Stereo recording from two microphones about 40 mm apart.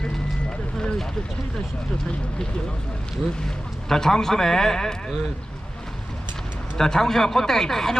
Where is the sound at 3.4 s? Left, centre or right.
Centre.